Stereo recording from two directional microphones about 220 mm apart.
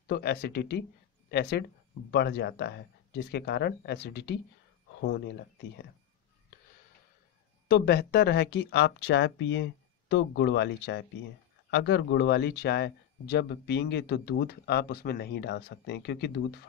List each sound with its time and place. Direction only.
0.1 s speech: 50° left (ahead or behind)
7.6 s speech: 45° left (ahead or behind)